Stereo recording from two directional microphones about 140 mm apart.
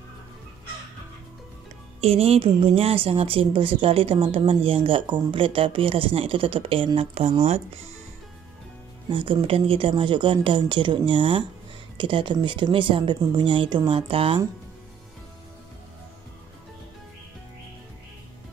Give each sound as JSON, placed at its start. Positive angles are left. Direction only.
{"t": 2.0, "sound": "a woman's voice", "side_deg": -45}
{"t": 9.1, "sound": "a woman's voice", "side_deg": -35}